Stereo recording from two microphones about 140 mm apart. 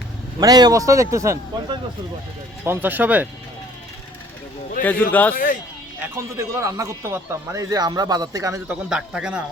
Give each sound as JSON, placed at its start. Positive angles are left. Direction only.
{"t": 0.3, "sound": "speech", "side_deg": -30}
{"t": 2.6, "sound": "speech", "side_deg": -15}
{"t": 4.8, "sound": "speech", "side_deg": 10}
{"t": 5.3, "sound": "speech", "side_deg": 85}
{"t": 6.1, "sound": "speech", "side_deg": -20}
{"t": 8.6, "sound": "speech", "side_deg": -5}